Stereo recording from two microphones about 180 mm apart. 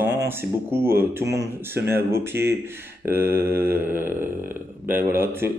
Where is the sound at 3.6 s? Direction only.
10° right (ahead or behind).